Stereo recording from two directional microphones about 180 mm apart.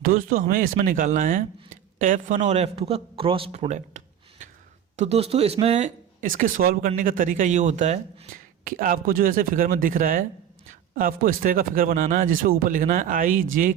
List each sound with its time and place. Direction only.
0.0 s speech: 50° right (ahead or behind)